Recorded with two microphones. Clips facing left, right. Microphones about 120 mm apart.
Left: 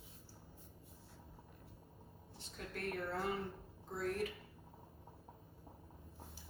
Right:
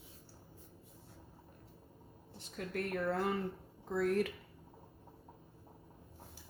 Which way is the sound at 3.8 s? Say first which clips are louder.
Right 7 dB; 75° right (ahead or behind).